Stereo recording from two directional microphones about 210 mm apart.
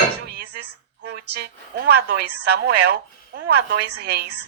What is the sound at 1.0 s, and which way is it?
A woman's voice, 50° right (ahead or behind).